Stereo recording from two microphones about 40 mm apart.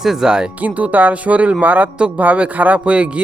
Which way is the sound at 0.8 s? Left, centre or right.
Right.